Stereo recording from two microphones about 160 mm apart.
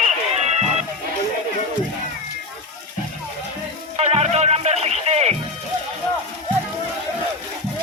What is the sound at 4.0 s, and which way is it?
Music, 40° right (ahead or behind).